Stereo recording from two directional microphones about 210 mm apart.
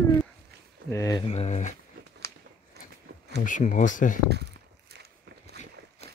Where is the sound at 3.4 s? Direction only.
40° left (ahead or behind).